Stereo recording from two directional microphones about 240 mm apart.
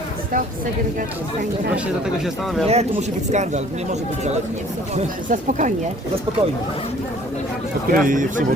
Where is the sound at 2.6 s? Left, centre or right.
Right.